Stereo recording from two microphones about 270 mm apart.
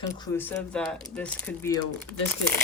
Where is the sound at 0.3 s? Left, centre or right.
Centre.